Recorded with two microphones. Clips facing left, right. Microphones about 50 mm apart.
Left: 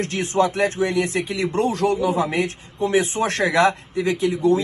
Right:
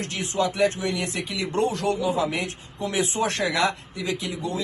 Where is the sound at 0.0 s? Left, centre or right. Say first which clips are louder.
Left 6 dB; left.